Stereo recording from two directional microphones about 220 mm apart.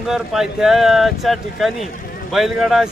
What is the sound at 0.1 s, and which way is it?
Speech, centre (ahead or behind).